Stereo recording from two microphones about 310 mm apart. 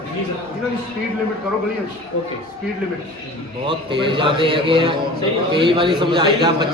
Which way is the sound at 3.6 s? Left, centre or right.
Centre.